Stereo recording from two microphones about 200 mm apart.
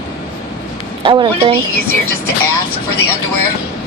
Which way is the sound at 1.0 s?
25° right (ahead or behind).